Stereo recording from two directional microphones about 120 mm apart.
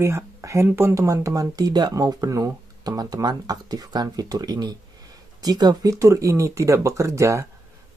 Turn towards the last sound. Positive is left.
turn(degrees=-25)  # may be behind; listen again after turning